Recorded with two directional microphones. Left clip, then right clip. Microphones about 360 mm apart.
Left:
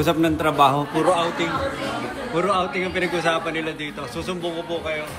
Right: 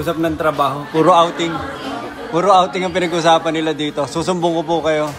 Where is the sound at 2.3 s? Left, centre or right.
Centre.